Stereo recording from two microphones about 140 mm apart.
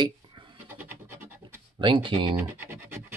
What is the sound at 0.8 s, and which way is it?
Scratch, 15° right (ahead or behind).